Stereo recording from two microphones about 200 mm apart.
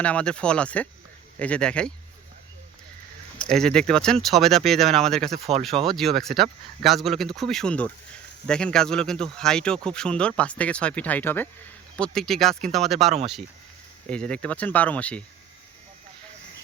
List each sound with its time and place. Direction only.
0.0 s speech: 5° left (ahead or behind)
3.3 s speech: 5° left (ahead or behind)
5.3 s speech: 30° right (ahead or behind)
5.8 s speech: centre (ahead or behind)